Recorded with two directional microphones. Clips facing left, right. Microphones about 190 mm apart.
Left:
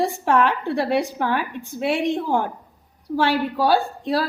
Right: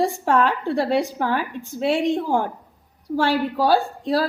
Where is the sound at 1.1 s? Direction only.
35° right (ahead or behind).